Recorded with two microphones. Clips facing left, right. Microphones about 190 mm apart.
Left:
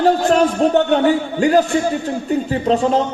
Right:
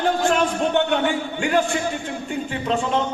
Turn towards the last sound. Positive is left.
turn(degrees=35)  # may be behind; listen again after turning